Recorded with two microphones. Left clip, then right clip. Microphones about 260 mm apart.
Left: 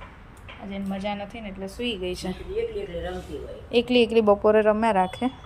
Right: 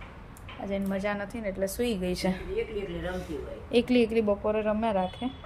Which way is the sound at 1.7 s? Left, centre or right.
Right.